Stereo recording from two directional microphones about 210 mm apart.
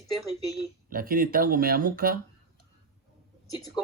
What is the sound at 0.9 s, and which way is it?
Speech, 45° right (ahead or behind).